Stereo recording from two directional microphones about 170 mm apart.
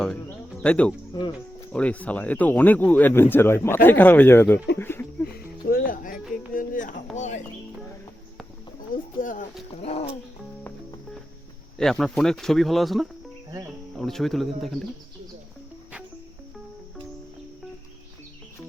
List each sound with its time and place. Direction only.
0.0 s music: 5° left (ahead or behind)
1.7 s speech: 10° left (ahead or behind)
5.2 s music: 60° left (ahead or behind)
6.3 s a sound: 50° left (ahead or behind)
9.2 s a sound: 55° left (ahead or behind)
9.8 s a sound: 35° left (ahead or behind)
11.8 s speech: 5° left (ahead or behind)
13.5 s cricket: 20° right (ahead or behind)
13.9 s speech: centre (ahead or behind)